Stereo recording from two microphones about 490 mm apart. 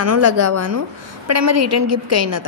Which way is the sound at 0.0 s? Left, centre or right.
Right.